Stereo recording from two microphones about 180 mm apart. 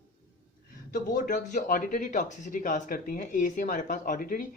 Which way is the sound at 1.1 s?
45° left (ahead or behind).